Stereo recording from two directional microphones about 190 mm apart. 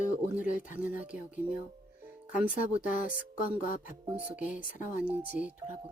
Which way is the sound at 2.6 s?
45° left (ahead or behind).